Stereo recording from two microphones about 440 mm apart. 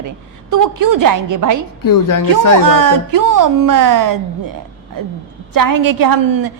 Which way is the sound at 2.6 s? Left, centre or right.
Right.